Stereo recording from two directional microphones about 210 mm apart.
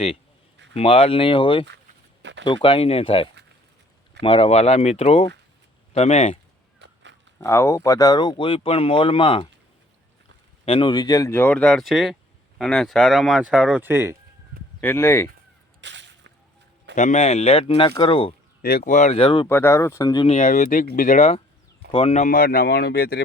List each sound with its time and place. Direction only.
0.7 s speech: 30° left (ahead or behind)
6.7 s a sound: 55° right (ahead or behind)
7.3 s speech: 15° left (ahead or behind)
10.7 s speech: 25° left (ahead or behind); by 14.2 s 10° right (ahead or behind)
14.8 s speech: 10° left (ahead or behind)
15.8 s whip: 60° right (ahead or behind)
16.9 s speech: 35° left (ahead or behind)
18.6 s speech: 40° left (ahead or behind); by 19.5 s 25° left (ahead or behind)
19.5 s speech: 10° left (ahead or behind); by 23.2 s 50° left (ahead or behind)